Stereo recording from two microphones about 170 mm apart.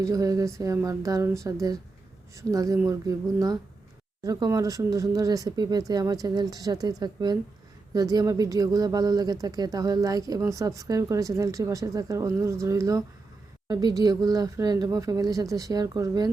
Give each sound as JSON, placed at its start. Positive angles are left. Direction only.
{"t": 0.0, "sound": "speech", "side_deg": -20}